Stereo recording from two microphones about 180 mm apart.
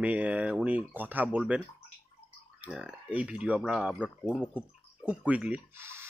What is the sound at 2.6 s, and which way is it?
Speech, 5° right (ahead or behind).